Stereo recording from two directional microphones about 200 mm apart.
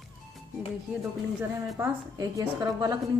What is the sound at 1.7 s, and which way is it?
Speech, 15° right (ahead or behind).